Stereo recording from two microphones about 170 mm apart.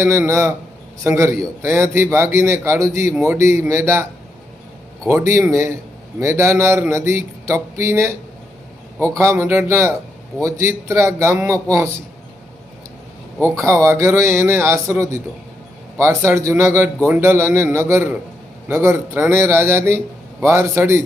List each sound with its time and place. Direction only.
0.0 s a man's voice: 15° right (ahead or behind)
5.0 s a man's voice: 15° right (ahead or behind)
13.4 s a man's voice: 15° right (ahead or behind)